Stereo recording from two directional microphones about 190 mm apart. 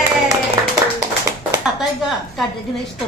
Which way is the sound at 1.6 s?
Centre (ahead or behind).